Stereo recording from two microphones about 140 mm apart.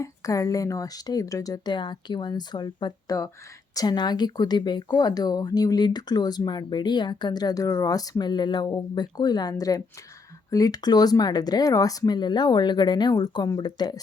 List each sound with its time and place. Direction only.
0.0 s speech: 25° left (ahead or behind)